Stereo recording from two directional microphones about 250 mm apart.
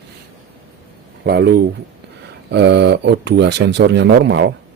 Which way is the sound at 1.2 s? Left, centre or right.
Right.